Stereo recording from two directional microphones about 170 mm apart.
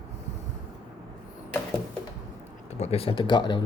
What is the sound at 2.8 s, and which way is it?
Speech, 35° left (ahead or behind).